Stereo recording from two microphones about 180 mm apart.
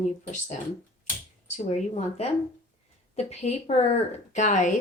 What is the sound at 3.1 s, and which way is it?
A woman's voice, 35° left (ahead or behind).